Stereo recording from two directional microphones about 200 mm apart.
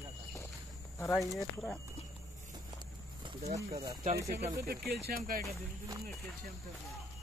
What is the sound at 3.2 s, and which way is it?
Speech, 35° right (ahead or behind).